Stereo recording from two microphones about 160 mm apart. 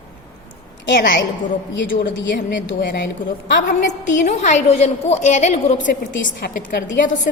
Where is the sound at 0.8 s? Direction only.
90° left.